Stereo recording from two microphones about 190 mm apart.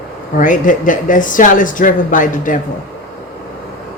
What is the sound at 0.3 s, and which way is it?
Speech, 45° left (ahead or behind).